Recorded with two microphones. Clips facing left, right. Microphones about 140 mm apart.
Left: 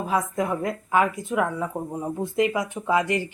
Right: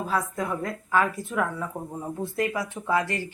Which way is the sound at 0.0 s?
20° left (ahead or behind).